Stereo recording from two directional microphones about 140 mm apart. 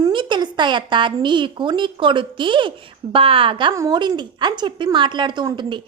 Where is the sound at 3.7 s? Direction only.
25° right (ahead or behind).